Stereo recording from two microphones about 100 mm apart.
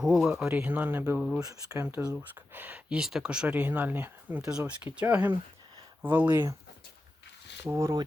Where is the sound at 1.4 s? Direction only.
30° right (ahead or behind).